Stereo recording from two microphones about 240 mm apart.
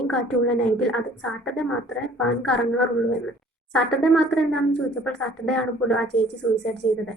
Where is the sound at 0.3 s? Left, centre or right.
Centre.